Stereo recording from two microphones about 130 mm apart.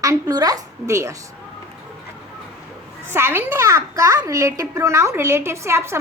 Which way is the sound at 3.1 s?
20° right (ahead or behind).